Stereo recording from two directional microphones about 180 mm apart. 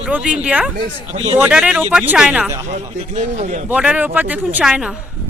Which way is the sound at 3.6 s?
5° right (ahead or behind).